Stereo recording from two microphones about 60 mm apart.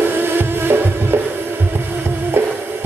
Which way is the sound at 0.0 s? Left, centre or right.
Right.